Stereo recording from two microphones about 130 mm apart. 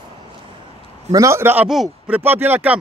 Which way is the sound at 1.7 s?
Centre (ahead or behind).